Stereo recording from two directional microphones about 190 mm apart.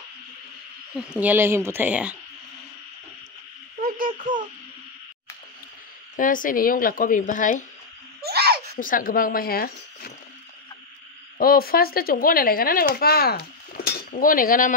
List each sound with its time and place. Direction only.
0.9 s speech: 5° right (ahead or behind)
3.8 s a sound: 45° right (ahead or behind)
6.1 s speech: 45° left (ahead or behind)
8.2 s a sound: 55° right (ahead or behind)
8.7 s speech: 45° left (ahead or behind)
11.3 s speech: 50° left (ahead or behind)
12.9 s cutlery: 55° left (ahead or behind)